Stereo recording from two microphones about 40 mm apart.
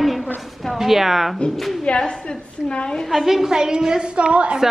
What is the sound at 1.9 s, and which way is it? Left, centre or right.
Speech, left.